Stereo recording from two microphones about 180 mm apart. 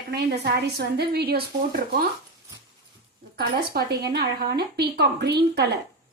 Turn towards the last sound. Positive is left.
turn(degrees=-65)  # may be behind; listen again after turning